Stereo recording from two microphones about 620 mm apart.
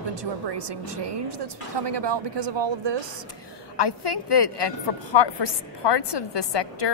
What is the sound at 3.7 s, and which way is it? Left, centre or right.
A woman's voice, left.